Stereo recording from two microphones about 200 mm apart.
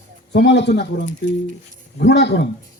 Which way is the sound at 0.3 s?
60° left (ahead or behind).